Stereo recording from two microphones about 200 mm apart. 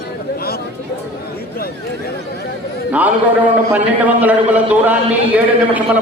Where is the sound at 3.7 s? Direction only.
10° right (ahead or behind).